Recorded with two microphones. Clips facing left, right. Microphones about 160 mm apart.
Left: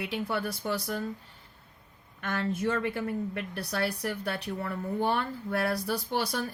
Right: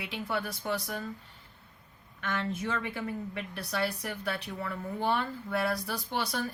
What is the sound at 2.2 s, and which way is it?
A woman's voice, 45° left (ahead or behind).